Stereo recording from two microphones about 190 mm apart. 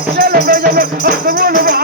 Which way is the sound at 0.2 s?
50° right (ahead or behind).